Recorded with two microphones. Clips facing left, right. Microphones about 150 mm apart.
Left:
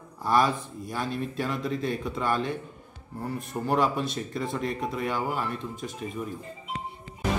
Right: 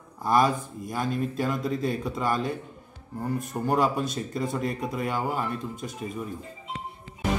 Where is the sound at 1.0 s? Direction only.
45° right (ahead or behind).